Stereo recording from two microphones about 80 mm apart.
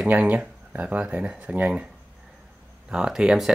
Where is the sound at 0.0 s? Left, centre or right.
Centre.